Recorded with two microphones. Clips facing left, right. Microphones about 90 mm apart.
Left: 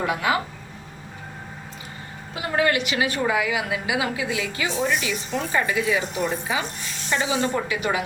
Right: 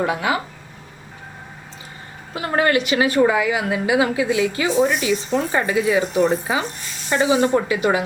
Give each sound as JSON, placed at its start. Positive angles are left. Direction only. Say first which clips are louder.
{"t": 0.0, "sound": "a woman's voice", "louder": "right 2 dB", "side_deg": -35}
{"t": 2.3, "sound": "a woman's voice", "louder": "right 4 dB", "side_deg": -45}